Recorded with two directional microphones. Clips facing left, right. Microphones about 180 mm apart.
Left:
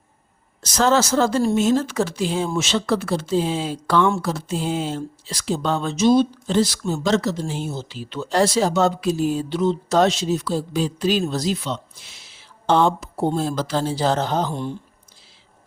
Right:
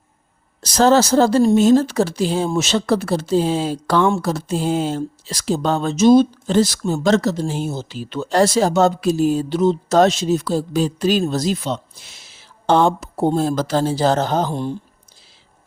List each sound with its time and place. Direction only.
0.6 s speech: 35° right (ahead or behind)